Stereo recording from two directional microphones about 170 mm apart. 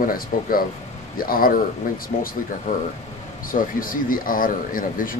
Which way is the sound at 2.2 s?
35° left (ahead or behind).